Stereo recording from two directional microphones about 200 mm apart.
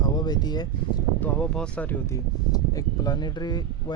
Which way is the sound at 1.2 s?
5° left (ahead or behind).